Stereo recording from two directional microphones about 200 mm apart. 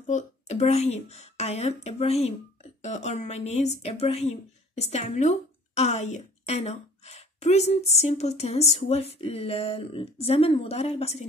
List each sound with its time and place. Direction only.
0.0 s speech: 35° left (ahead or behind)